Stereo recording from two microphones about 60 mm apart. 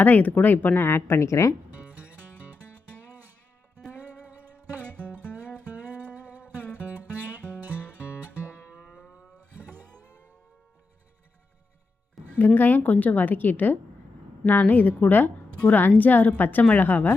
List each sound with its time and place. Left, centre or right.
0.0 s a woman's voice: left
0.9 s a woman's voice: left
1.2 s speech: left
12.5 s a woman's voice: left